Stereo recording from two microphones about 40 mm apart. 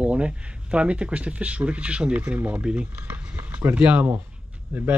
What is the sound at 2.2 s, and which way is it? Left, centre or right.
Speech, right.